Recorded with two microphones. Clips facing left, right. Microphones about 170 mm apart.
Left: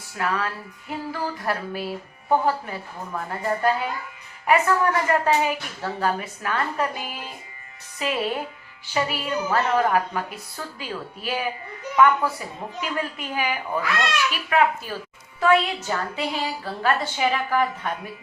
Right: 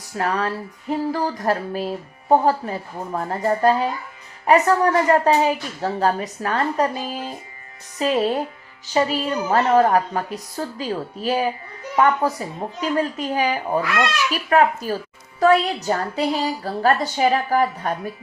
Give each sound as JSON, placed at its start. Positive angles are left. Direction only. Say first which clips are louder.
{"t": 0.2, "sound": "a woman's voice", "louder": "right 4 dB", "side_deg": -35}